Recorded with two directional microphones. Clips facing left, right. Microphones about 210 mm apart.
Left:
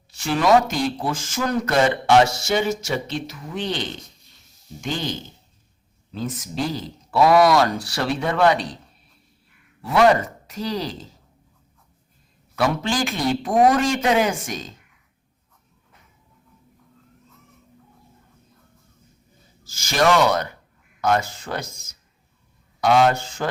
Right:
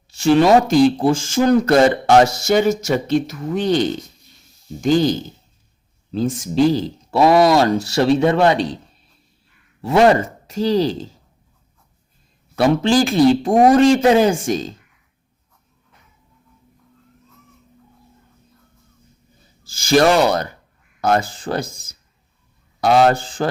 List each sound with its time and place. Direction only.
0.1 s speech: 30° right (ahead or behind)
9.8 s speech: 25° right (ahead or behind)
12.5 s speech: 30° right (ahead or behind)
19.6 s speech: 30° right (ahead or behind)